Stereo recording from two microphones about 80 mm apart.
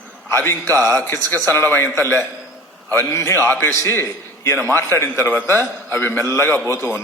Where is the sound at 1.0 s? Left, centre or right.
Left.